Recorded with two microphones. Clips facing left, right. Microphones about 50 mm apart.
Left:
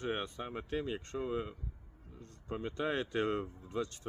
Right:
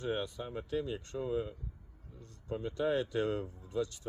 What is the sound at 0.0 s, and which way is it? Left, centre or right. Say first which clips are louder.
Speech: right 1 dB; left.